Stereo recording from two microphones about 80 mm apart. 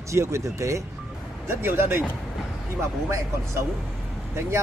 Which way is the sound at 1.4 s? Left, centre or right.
Right.